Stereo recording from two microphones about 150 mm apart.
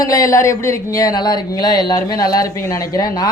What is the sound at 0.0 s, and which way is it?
Speech, 20° left (ahead or behind).